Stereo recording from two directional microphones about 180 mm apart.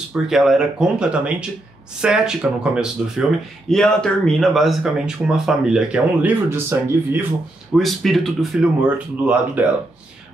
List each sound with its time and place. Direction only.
0.1 s speech: centre (ahead or behind)
7.7 s speech: centre (ahead or behind)